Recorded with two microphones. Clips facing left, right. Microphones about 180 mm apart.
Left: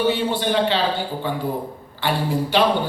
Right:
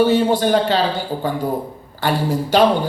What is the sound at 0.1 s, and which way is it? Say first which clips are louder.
Speech: right 6 dB; 45° right (ahead or behind).